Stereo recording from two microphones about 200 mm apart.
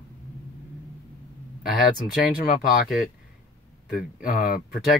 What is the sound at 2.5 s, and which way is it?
Speech, 40° left (ahead or behind).